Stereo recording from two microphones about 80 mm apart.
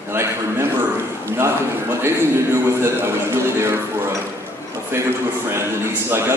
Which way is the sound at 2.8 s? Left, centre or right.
Right.